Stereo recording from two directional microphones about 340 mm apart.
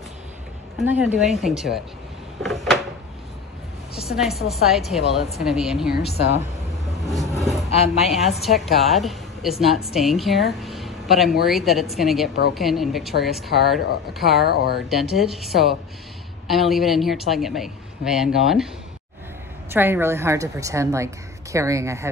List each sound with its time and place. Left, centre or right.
0.7 s a woman's voice: centre
3.9 s a woman's voice: centre
6.1 s a woman's voice: left
7.1 s vehicle: centre
7.7 s a woman's voice: centre
8.1 s a woman's voice: centre
14.4 s a woman's voice: left
14.9 s a woman's voice: centre
19.7 s a woman's voice: centre